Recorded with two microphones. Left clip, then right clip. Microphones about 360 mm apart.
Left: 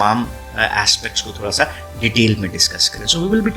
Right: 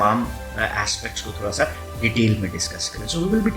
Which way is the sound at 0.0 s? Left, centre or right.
Left.